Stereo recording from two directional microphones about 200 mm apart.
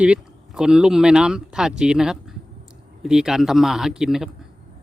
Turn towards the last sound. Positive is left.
turn(degrees=-5)  # may be behind; listen again after turning